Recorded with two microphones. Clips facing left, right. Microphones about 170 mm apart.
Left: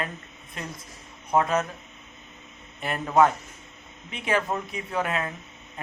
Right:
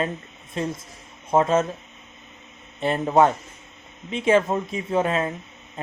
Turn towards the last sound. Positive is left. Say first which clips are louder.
# right 6 dB
turn(degrees=-25)  # may be behind; listen again after turning